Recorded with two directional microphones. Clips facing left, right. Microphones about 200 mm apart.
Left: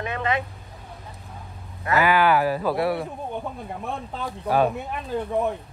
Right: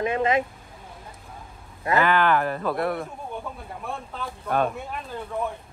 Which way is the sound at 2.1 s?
5° left (ahead or behind).